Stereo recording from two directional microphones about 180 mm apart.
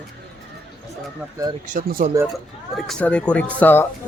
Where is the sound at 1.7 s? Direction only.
50° right (ahead or behind).